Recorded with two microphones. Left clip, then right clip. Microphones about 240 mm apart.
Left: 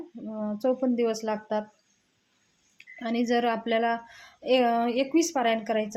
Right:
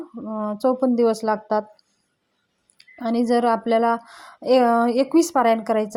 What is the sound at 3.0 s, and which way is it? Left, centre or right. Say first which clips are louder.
A woman's voice: right 6 dB; right.